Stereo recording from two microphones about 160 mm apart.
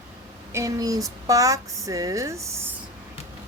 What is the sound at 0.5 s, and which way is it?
Speech, 20° right (ahead or behind).